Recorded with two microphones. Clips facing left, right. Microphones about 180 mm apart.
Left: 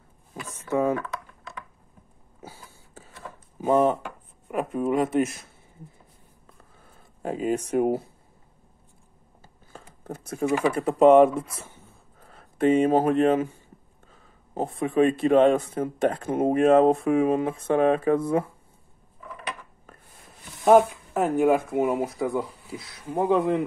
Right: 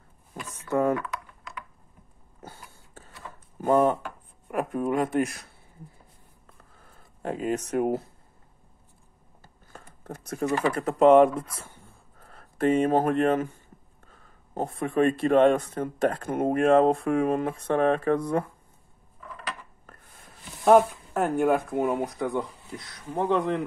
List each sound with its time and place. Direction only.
0.7 s typing: 5° left (ahead or behind)
2.4 s a sound: 10° left (ahead or behind)
3.6 s speech: 5° left (ahead or behind)
7.2 s speech: 10° left (ahead or behind)
9.4 s biting: 10° left (ahead or behind)
10.4 s speech: 10° left (ahead or behind)
11.3 s a sound: 25° left (ahead or behind)
12.7 s speech: 10° left (ahead or behind)
21.1 s speech: centre (ahead or behind)